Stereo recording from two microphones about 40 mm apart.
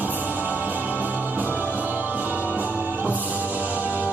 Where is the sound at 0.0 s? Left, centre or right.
Right.